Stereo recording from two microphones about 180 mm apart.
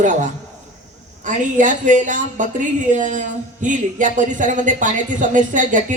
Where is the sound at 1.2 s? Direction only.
45° right (ahead or behind).